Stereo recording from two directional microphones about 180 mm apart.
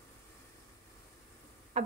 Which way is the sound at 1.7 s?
40° right (ahead or behind).